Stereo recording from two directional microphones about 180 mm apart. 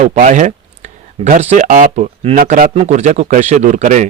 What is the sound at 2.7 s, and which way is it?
Speech, 35° right (ahead or behind).